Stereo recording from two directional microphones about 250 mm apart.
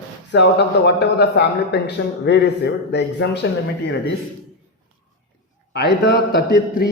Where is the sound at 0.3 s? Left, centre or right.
Left.